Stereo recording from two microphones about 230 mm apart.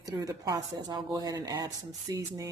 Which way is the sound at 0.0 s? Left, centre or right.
Centre.